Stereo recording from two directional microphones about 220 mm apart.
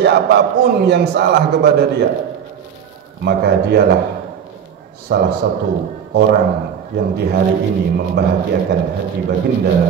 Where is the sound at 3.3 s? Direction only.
45° right (ahead or behind).